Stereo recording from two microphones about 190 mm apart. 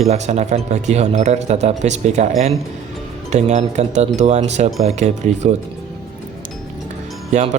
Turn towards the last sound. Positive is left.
turn(degrees=-35)  # may be behind; listen again after turning